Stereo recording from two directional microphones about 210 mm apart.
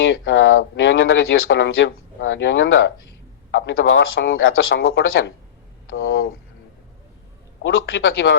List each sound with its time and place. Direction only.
0.0 s speech: 65° left (ahead or behind)
7.6 s speech: 70° left (ahead or behind)